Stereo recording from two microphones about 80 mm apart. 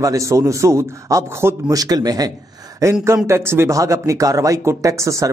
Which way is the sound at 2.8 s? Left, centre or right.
Right.